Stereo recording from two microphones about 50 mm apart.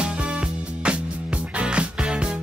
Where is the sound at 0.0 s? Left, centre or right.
Right.